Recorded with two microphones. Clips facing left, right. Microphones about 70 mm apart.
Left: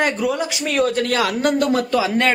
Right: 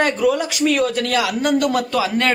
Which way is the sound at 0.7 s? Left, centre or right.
Left.